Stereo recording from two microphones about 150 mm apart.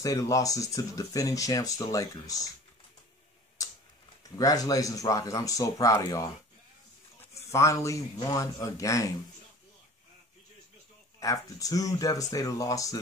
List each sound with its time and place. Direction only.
0.0 s speech: 20° left (ahead or behind)
4.2 s speech: 25° left (ahead or behind)
7.5 s speech: 20° left (ahead or behind)
11.1 s speech: 20° left (ahead or behind)